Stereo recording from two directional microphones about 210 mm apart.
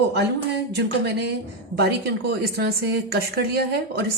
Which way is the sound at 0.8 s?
55° right (ahead or behind).